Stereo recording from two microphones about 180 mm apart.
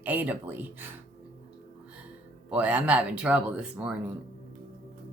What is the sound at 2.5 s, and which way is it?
Speech, 5° right (ahead or behind).